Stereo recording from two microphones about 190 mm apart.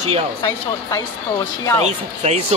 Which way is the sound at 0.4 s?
15° left (ahead or behind).